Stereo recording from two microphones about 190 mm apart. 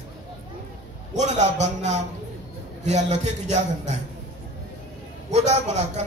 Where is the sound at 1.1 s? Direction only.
35° right (ahead or behind).